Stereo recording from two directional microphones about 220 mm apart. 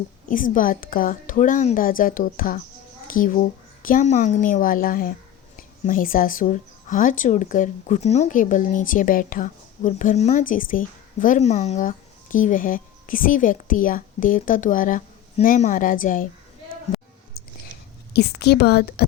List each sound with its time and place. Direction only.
0.3 s speech: 35° left (ahead or behind)
18.1 s a woman's voice: 50° left (ahead or behind)